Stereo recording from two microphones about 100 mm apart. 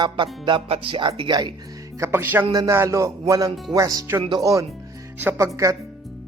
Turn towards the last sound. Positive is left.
turn(degrees=-35)  # may be behind; listen again after turning